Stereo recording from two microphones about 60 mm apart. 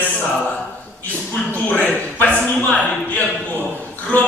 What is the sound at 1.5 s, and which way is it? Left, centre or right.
A man's voice, left.